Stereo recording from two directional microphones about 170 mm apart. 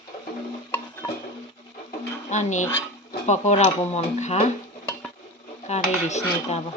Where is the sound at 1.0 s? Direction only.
15° left (ahead or behind).